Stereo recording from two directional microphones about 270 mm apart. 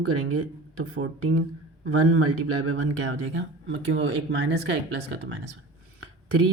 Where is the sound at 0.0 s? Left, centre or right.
Right.